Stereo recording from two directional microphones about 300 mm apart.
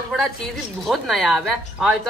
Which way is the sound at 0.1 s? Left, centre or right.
Centre.